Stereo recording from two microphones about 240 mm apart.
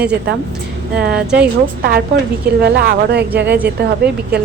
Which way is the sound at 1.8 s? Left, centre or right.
Right.